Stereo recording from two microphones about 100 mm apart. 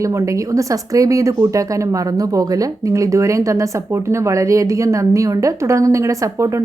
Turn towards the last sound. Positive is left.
turn(degrees=-30)  # may be behind; listen again after turning